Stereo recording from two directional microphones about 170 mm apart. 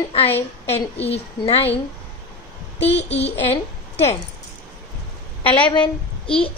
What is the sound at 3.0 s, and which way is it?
A woman's voice, 35° left (ahead or behind).